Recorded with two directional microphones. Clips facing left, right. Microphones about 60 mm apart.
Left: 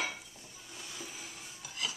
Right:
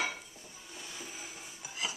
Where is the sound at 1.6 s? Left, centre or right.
Centre.